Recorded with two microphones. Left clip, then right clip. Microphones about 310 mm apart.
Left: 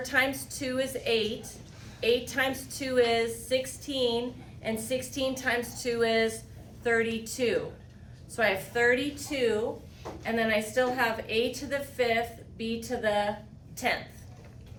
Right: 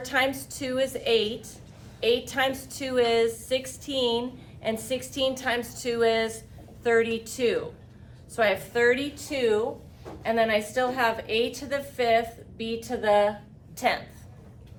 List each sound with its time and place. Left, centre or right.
0.0 s a woman's voice: centre